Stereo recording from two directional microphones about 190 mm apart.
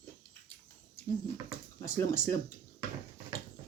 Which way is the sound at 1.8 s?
15° left (ahead or behind).